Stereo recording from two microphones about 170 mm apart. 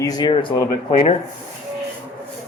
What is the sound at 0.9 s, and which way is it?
Speech, 40° left (ahead or behind).